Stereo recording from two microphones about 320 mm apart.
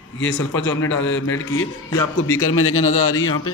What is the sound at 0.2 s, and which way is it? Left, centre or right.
A man's voice, left.